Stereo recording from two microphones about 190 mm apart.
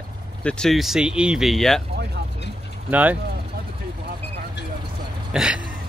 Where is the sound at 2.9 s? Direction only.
10° right (ahead or behind).